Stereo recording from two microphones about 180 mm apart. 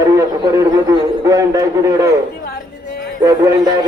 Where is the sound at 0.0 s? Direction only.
20° right (ahead or behind).